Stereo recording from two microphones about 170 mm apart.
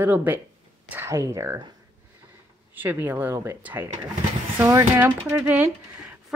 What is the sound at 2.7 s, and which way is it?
Speech, 10° right (ahead or behind).